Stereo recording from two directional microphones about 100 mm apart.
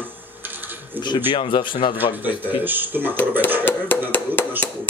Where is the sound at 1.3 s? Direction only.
60° left (ahead or behind).